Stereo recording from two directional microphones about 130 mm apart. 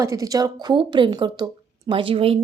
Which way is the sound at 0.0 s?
25° right (ahead or behind).